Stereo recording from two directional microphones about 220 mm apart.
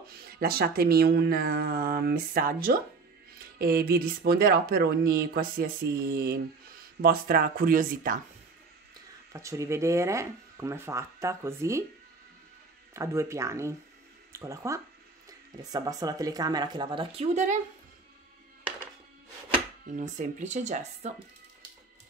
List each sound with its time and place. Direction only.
0.1 s speech: 45° right (ahead or behind)
9.3 s speech: 15° right (ahead or behind)
12.9 s speech: 15° right (ahead or behind); by 17.6 s 30° right (ahead or behind)
20.0 s speech: 35° right (ahead or behind)